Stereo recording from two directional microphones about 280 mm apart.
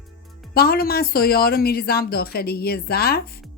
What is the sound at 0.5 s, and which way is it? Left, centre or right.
A woman's voice, left.